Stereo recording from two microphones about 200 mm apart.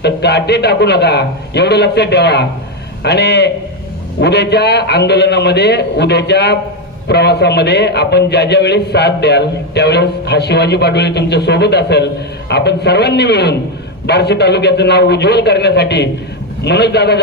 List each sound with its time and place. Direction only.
0.0 s a man's voice: 55° left (ahead or behind)